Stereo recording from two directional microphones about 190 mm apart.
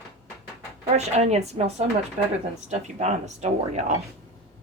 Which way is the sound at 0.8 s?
35° right (ahead or behind).